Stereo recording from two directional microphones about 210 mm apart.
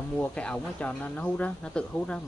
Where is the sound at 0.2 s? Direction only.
5° left (ahead or behind).